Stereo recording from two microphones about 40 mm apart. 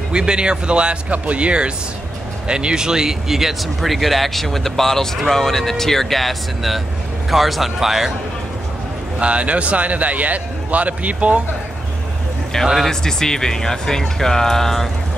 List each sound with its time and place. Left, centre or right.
0.1 s a man's voice: right
9.2 s a man's voice: right
12.5 s speech: centre